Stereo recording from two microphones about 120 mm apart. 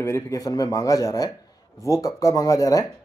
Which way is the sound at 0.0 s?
25° left (ahead or behind).